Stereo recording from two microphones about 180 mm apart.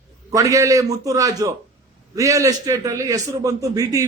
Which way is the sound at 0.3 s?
15° right (ahead or behind).